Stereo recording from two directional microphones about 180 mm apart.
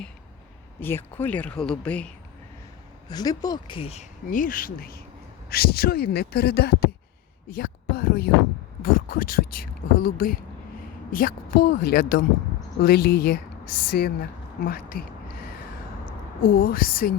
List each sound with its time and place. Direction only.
0.8 s speech: 10° left (ahead or behind)
3.1 s speech: 20° left (ahead or behind)
4.3 s speech: 50° left (ahead or behind)
16.4 s speech: 55° left (ahead or behind)